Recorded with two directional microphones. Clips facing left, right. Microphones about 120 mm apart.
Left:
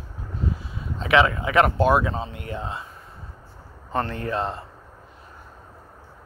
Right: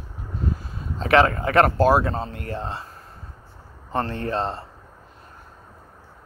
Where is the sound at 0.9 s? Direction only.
40° right (ahead or behind).